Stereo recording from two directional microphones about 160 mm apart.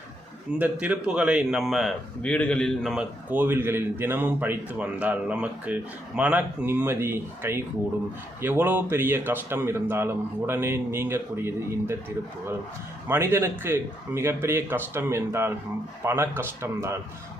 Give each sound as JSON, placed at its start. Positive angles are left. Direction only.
{"t": 0.6, "sound": "a man's voice", "side_deg": -10}
{"t": 13.1, "sound": "a man's voice", "side_deg": -15}